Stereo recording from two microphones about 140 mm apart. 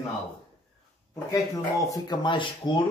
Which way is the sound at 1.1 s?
25° left (ahead or behind).